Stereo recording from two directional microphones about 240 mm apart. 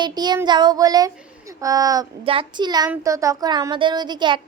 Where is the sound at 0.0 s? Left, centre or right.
Centre.